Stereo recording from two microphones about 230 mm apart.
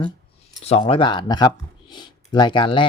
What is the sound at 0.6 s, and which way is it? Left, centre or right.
Speech, left.